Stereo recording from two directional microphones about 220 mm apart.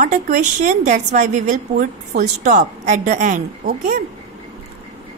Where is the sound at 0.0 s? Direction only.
35° right (ahead or behind).